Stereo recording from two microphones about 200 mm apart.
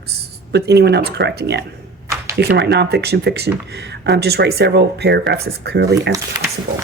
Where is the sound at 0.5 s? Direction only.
55° right (ahead or behind).